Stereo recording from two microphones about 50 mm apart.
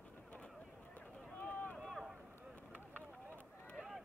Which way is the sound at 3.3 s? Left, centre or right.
Left.